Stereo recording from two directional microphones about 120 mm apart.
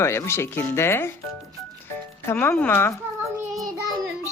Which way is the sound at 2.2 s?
20° left (ahead or behind).